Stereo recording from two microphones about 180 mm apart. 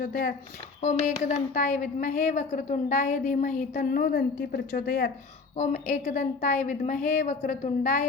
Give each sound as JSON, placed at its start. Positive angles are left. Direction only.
{"t": 0.0, "sound": "a woman's voice", "side_deg": 55}
{"t": 0.8, "sound": "a woman's voice", "side_deg": 40}
{"t": 5.5, "sound": "a woman's voice", "side_deg": 45}